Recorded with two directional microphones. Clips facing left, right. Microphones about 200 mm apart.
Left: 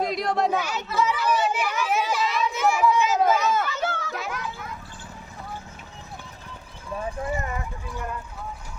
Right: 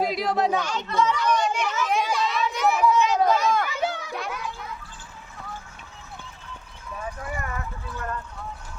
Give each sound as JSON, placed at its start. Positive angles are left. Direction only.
{"t": 0.0, "sound": "chatter", "side_deg": 0}
{"t": 3.7, "sound": "children playing", "side_deg": -15}
{"t": 4.1, "sound": "music", "side_deg": 0}
{"t": 7.0, "sound": "clip-clop", "side_deg": 25}